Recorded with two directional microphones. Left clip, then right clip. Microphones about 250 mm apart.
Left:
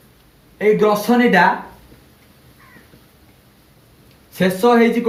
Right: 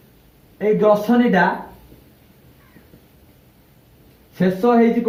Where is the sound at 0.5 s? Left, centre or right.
Left.